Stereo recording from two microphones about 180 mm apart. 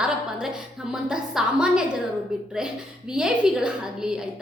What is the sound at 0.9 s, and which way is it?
Speech, 5° right (ahead or behind).